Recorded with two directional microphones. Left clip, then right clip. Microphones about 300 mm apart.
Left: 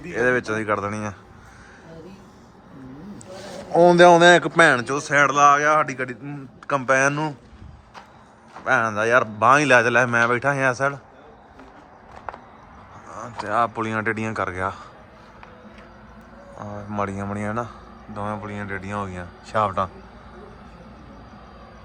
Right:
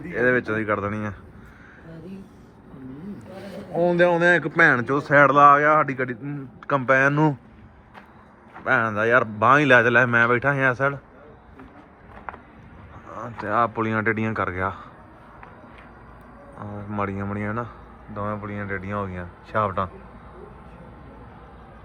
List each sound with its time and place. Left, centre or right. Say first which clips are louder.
0.1 s a man's voice: even; centre
3.8 s a man's voice: left 7 dB; left; by 7.3 s centre
8.6 s a man's voice: left 1 dB; centre
13.1 s a man's voice: even; centre
16.6 s a man's voice: left 1 dB; centre